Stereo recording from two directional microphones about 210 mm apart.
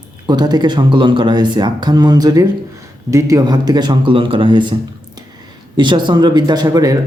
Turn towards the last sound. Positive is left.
turn(degrees=-15)  # may be behind; listen again after turning